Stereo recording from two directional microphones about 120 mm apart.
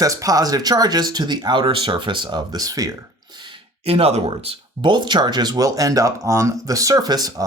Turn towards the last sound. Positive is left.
turn(degrees=-30)  # may be behind; listen again after turning